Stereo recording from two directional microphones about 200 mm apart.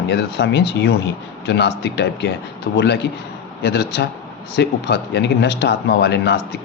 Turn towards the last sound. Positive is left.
turn(degrees=60)  # may be behind; listen again after turning